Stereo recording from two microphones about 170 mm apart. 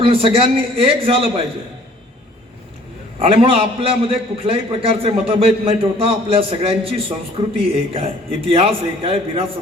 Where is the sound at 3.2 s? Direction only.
35° right (ahead or behind).